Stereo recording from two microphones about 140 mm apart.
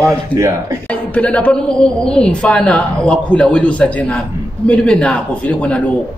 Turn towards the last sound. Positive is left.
turn(degrees=10)  # may be behind; listen again after turning